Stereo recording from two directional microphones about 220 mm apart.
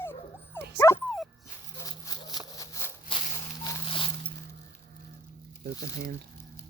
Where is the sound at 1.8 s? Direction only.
15° left (ahead or behind).